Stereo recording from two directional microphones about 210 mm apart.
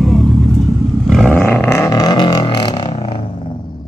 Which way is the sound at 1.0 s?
Centre (ahead or behind).